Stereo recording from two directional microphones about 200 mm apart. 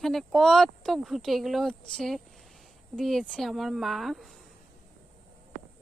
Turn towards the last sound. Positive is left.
turn(degrees=0)  # may be behind; listen again after turning